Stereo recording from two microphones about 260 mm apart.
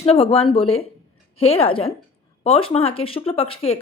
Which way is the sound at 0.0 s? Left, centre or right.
Left.